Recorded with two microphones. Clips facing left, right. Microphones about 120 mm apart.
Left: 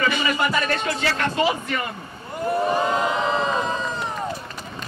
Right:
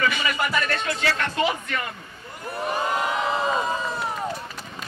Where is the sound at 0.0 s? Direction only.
30° left (ahead or behind).